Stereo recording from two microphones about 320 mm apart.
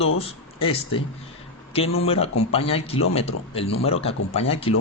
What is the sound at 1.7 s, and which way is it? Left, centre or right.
Speech, centre.